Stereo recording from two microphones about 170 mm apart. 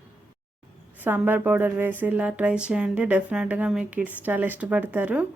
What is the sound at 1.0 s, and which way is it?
Speech, 10° right (ahead or behind).